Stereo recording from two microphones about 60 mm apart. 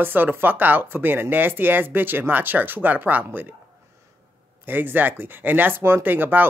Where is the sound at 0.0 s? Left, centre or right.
Right.